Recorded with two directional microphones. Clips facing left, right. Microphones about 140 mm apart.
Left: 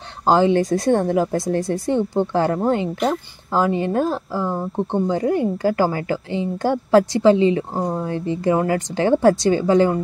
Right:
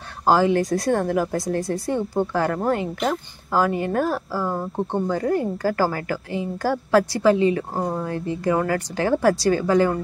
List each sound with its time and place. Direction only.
0.2 s a woman's voice: 25° left (ahead or behind)